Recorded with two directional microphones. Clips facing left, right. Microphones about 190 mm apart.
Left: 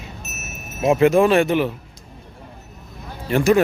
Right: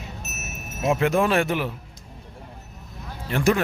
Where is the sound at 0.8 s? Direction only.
10° left (ahead or behind).